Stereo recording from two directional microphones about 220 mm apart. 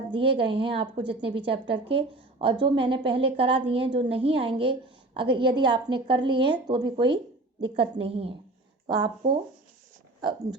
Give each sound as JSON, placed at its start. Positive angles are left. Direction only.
{"t": 0.3, "sound": "a woman's voice", "side_deg": -25}